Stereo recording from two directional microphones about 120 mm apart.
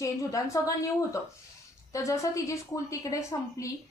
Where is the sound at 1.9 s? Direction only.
25° left (ahead or behind).